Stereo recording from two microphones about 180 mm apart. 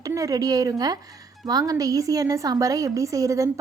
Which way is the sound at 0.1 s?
20° right (ahead or behind).